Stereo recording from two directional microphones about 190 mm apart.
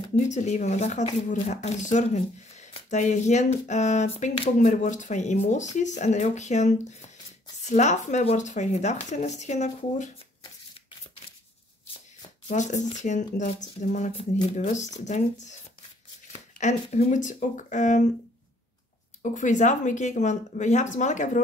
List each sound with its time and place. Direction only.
0.1 s speech: 40° left (ahead or behind)
12.2 s speech: 40° left (ahead or behind)
19.3 s speech: 40° left (ahead or behind)